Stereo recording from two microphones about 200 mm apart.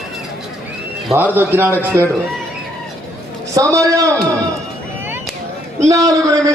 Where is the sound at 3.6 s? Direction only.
15° right (ahead or behind).